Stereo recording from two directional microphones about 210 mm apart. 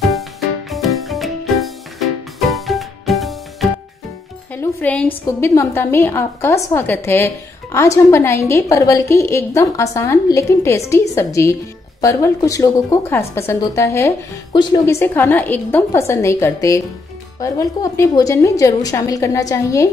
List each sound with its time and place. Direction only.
0.0 s music: centre (ahead or behind)
4.6 s a woman's voice: 5° left (ahead or behind)